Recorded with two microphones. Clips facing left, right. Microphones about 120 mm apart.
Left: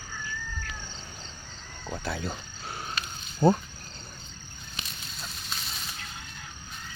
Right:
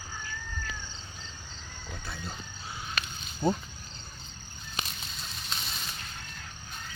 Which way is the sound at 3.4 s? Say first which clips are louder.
Left 6 dB; 40° left (ahead or behind).